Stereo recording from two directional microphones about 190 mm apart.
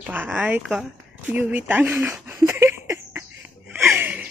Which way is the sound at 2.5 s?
15° right (ahead or behind).